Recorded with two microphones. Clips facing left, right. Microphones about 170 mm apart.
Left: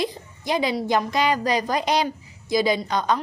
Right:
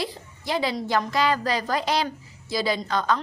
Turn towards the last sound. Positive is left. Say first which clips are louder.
# left 2 dB
turn(degrees=15)  # may be behind; listen again after turning